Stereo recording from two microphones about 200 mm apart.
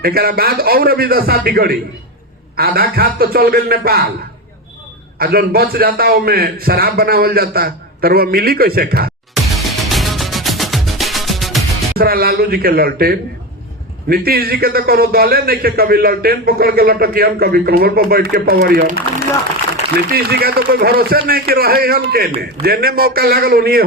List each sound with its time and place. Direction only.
0.0 s a man's voice: 50° right (ahead or behind)
5.2 s a man's voice: 50° right (ahead or behind)
9.3 s music: centre (ahead or behind)
11.9 s a man's voice: 50° right (ahead or behind)
20.1 s a man's voice: 50° right (ahead or behind)